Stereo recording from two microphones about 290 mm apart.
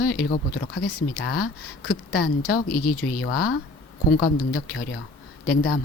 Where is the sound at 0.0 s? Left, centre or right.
Left.